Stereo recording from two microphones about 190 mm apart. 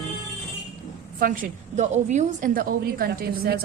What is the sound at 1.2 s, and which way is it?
A woman's voice, 40° right (ahead or behind).